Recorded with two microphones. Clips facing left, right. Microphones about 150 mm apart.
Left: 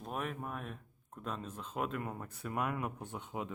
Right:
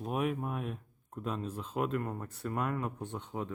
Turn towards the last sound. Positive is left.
turn(degrees=10)  # may be behind; listen again after turning